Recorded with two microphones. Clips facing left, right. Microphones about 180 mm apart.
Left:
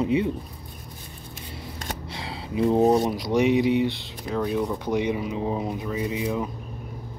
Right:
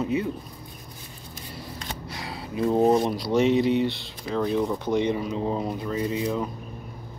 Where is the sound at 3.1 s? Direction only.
15° left (ahead or behind).